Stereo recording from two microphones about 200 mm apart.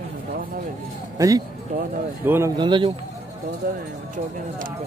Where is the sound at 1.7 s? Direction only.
45° right (ahead or behind).